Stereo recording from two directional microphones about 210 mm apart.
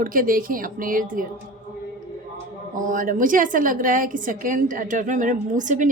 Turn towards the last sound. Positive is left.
turn(degrees=-35)  # may be behind; listen again after turning